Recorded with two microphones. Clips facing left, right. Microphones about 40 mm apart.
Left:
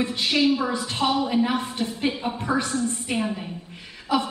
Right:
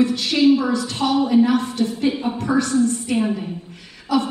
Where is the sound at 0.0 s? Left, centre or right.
Left.